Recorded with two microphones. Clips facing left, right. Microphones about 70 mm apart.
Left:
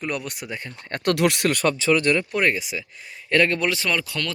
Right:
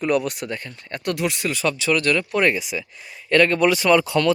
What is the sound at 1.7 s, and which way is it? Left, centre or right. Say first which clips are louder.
Speech: right 1 dB; left.